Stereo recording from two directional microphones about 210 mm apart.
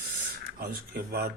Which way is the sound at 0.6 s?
45° right (ahead or behind).